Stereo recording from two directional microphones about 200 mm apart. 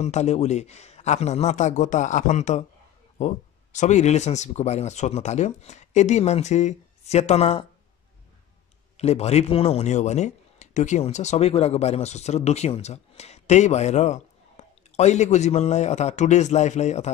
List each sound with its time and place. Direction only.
0.0 s speech: 35° left (ahead or behind)
8.9 s speech: 30° left (ahead or behind)